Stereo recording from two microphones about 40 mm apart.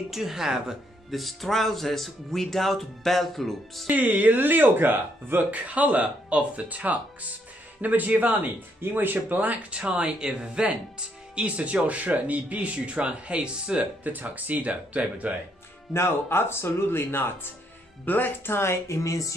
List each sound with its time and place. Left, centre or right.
0.1 s speech: centre
1.1 s speech: centre
3.8 s speech: right
5.5 s speech: right
9.7 s speech: right
14.0 s speech: right
15.9 s speech: left
18.0 s speech: left